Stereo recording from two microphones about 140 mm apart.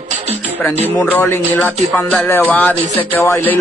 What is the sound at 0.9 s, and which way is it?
Music, 15° left (ahead or behind).